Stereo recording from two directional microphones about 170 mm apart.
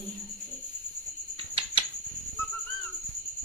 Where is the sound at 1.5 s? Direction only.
30° right (ahead or behind).